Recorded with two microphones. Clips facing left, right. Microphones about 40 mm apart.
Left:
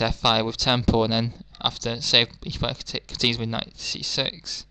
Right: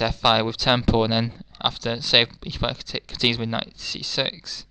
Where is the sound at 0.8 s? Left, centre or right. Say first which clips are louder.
Right 1 dB; right; by 4.7 s centre.